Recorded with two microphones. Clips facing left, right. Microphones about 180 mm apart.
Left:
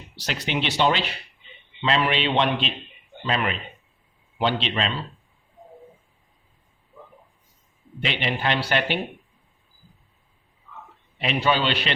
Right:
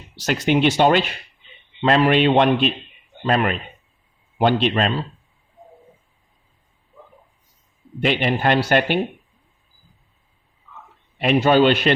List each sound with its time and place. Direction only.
0.2 s speech: 45° right (ahead or behind)
8.0 s speech: 50° right (ahead or behind)
11.2 s speech: 45° right (ahead or behind)